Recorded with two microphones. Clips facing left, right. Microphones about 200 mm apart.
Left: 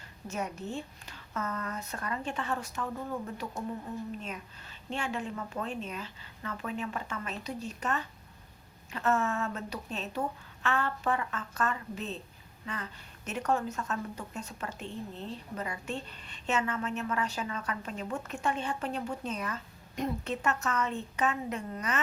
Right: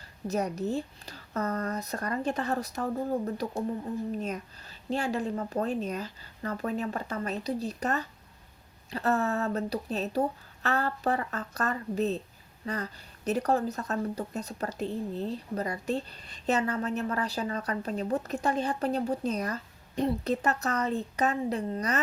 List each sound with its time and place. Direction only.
0.3 s speech: 40° right (ahead or behind)